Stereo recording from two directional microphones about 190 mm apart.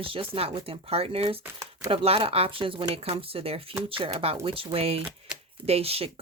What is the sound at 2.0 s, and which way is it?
Speech, 30° right (ahead or behind).